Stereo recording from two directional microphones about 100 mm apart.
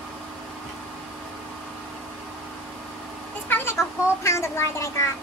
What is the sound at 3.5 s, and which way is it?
Speech, 25° left (ahead or behind).